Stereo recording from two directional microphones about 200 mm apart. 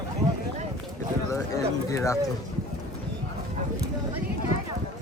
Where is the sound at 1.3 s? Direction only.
15° left (ahead or behind).